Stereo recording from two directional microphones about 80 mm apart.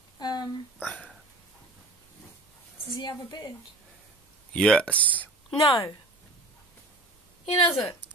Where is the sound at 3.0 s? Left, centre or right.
Left.